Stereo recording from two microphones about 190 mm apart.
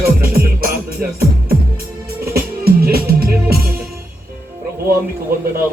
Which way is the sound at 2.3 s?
55° right (ahead or behind).